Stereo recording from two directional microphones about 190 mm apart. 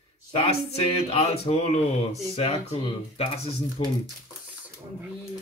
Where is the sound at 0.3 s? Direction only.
30° left (ahead or behind).